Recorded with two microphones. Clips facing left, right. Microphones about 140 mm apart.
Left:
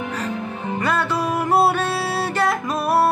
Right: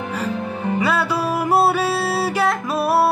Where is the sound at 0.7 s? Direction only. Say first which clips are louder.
Right 1 dB; 10° right (ahead or behind).